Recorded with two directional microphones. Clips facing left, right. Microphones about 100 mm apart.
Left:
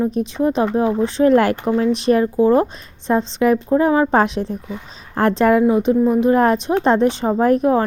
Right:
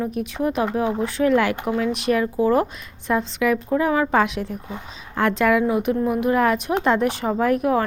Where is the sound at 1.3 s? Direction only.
40° left (ahead or behind).